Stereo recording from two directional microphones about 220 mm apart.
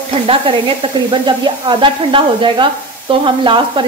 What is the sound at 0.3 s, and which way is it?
Speech, 25° right (ahead or behind).